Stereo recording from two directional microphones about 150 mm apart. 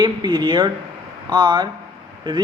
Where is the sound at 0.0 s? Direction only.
30° right (ahead or behind).